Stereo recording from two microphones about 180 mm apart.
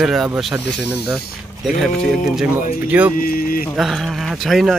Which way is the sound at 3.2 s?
55° left (ahead or behind).